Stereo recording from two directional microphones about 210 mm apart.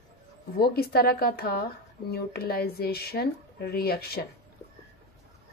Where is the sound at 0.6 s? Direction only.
45° left (ahead or behind).